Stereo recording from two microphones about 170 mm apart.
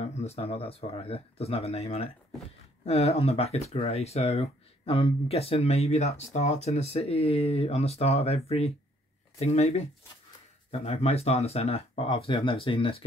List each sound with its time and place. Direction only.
0.0 s speech: 40° left (ahead or behind)